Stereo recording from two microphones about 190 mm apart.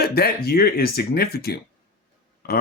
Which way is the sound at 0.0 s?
55° left (ahead or behind).